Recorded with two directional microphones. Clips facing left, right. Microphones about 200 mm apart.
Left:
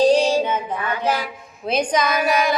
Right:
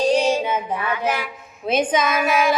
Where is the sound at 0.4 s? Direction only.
10° right (ahead or behind).